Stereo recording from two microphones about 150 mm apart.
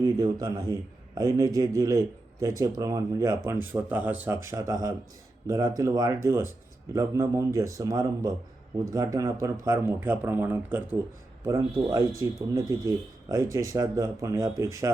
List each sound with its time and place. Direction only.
0.0 s a man's voice: 25° right (ahead or behind)
11.4 s a man's voice: 25° right (ahead or behind)